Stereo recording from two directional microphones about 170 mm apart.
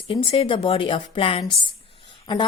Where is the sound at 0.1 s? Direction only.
30° left (ahead or behind).